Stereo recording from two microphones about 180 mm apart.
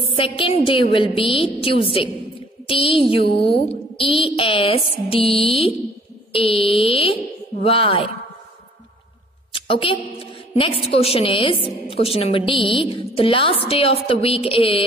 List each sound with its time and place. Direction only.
0.1 s a woman's voice: 30° left (ahead or behind)
9.5 s a woman's voice: 30° left (ahead or behind)